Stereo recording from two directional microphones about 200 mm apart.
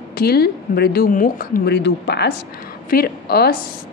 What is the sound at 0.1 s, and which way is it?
A woman's voice, 50° left (ahead or behind).